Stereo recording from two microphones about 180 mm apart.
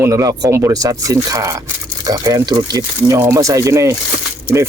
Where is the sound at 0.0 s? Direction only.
20° right (ahead or behind).